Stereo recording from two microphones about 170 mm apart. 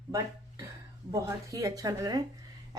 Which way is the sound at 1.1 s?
20° right (ahead or behind).